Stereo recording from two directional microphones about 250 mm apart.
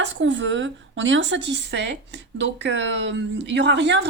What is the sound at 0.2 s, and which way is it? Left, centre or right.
A woman's voice, right.